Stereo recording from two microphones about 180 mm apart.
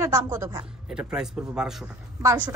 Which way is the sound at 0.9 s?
5° right (ahead or behind).